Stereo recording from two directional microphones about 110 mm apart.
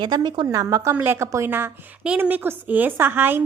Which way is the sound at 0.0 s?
40° right (ahead or behind).